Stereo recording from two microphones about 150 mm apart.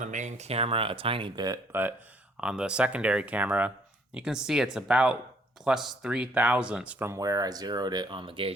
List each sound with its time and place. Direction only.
0.0 s speech: 55° right (ahead or behind); by 1.5 s 30° right (ahead or behind)
1.7 s speech: 15° right (ahead or behind)
7.1 s speech: 25° right (ahead or behind)